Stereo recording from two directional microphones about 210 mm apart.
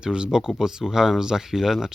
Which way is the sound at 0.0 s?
5° right (ahead or behind).